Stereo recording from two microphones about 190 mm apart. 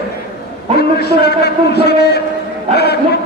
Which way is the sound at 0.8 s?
60° left (ahead or behind).